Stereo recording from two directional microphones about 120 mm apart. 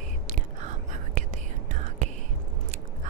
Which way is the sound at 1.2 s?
90° right.